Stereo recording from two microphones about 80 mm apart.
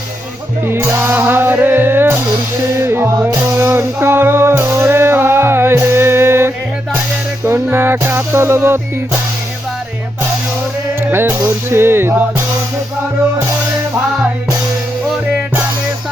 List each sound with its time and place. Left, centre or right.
0.7 s music: right
3.2 s music: right
11.0 s music: right